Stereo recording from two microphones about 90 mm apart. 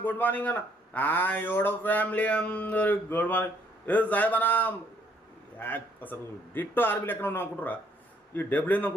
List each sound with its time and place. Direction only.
0.0 s a man's voice: 20° left (ahead or behind)